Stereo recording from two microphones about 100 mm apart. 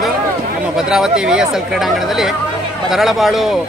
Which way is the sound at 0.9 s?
5° right (ahead or behind).